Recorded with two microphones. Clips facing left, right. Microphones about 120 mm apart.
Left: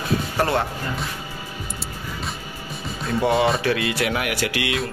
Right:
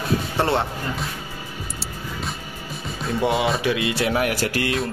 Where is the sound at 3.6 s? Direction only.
25° right (ahead or behind); by 4.8 s 40° right (ahead or behind).